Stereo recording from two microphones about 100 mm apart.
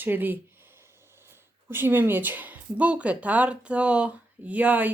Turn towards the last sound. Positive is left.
turn(degrees=-15)  # may be behind; listen again after turning